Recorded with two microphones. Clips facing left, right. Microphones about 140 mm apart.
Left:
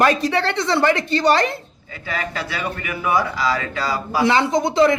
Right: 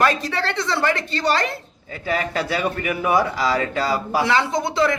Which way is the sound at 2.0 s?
40° right (ahead or behind).